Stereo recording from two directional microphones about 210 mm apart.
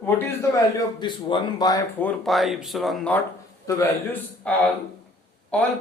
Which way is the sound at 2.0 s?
5° left (ahead or behind).